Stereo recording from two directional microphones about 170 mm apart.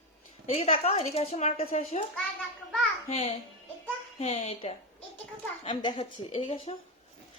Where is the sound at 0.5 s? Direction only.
35° left (ahead or behind).